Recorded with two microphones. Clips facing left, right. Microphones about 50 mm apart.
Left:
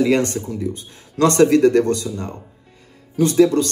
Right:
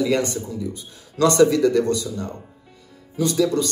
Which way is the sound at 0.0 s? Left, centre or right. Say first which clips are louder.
Left 4 dB; left.